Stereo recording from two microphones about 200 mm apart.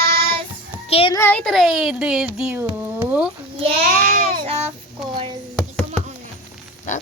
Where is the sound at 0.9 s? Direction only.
30° left (ahead or behind).